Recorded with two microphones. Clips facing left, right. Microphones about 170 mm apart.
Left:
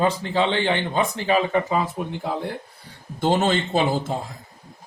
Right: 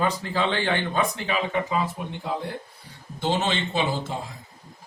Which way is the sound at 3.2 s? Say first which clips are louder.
Left 5 dB; 45° left (ahead or behind).